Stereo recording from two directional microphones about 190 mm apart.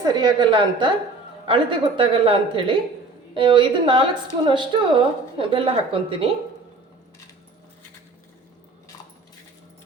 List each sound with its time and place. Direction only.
0.0 s a woman's voice: 20° right (ahead or behind)